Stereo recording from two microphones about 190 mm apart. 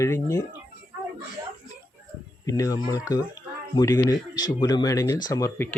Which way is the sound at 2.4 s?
15° left (ahead or behind).